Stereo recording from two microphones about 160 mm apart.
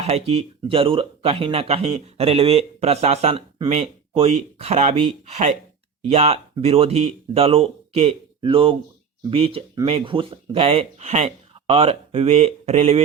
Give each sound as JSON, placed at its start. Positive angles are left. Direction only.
{"t": 0.0, "sound": "speech", "side_deg": -40}